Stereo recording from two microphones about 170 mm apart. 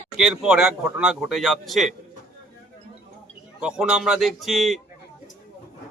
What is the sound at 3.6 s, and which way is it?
A man's voice, 5° right (ahead or behind).